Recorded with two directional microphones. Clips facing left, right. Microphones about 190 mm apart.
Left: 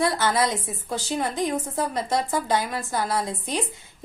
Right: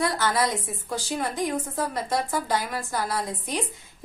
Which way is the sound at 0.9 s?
20° left (ahead or behind).